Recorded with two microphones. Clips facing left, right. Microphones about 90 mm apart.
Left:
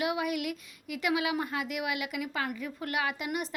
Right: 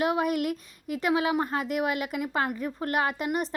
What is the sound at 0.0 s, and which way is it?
A woman's voice, 40° right (ahead or behind).